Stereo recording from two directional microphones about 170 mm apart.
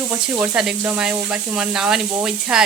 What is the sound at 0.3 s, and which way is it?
Speech, 5° right (ahead or behind).